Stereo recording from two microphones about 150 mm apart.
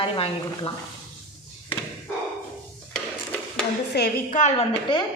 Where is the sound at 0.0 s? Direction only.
35° left (ahead or behind).